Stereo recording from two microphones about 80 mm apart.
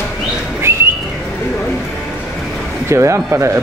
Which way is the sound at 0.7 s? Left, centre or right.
Right.